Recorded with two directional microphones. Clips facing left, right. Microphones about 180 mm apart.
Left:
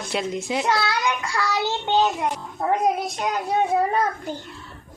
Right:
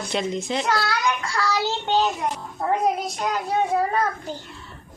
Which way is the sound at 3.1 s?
20° left (ahead or behind).